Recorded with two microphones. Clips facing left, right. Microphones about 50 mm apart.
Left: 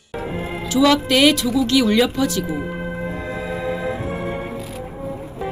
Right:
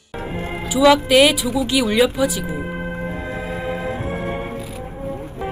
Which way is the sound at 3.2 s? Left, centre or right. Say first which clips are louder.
Left 1 dB; right.